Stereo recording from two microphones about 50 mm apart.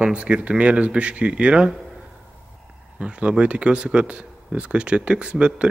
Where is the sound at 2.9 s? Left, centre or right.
Right.